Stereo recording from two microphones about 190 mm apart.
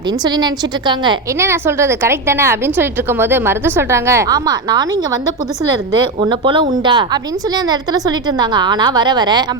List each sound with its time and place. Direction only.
0.3 s a woman's voice: 20° right (ahead or behind)
6.1 s a woman's voice: 25° right (ahead or behind)